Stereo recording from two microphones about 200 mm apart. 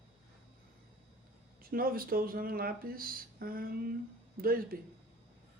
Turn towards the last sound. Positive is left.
turn(degrees=-45)  # may be behind; listen again after turning